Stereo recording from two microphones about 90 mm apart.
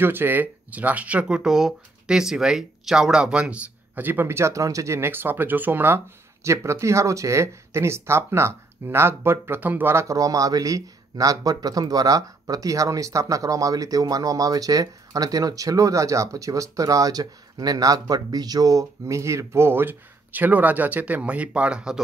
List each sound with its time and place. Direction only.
0.0 s speech: 25° right (ahead or behind)